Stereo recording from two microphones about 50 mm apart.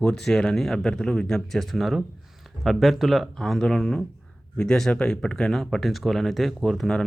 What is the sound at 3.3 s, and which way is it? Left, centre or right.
Speech, centre.